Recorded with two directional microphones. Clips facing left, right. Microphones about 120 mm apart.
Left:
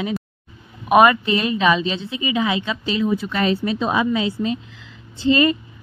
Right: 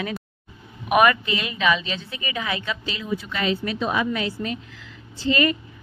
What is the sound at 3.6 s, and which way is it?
A woman's voice, 25° left (ahead or behind).